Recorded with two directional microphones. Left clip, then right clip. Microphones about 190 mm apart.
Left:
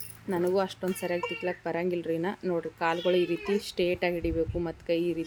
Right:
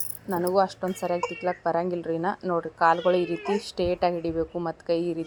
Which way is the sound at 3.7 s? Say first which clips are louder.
Right 5 dB; 25° left (ahead or behind).